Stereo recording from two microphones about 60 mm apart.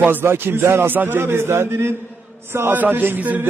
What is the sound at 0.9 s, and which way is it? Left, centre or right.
A man's voice, right.